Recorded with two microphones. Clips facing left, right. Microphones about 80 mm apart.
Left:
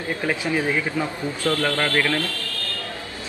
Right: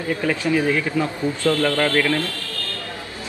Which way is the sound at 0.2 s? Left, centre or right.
Centre.